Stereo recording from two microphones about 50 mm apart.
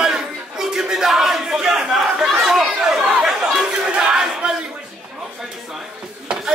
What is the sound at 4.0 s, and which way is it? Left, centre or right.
Battle cry, centre.